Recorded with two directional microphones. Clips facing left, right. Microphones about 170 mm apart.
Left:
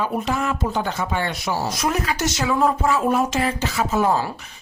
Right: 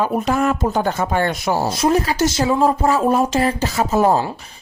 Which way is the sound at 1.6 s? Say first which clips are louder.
Right 7 dB; 30° right (ahead or behind).